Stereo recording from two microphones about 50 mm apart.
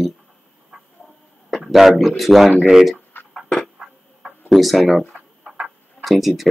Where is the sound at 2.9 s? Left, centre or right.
Left.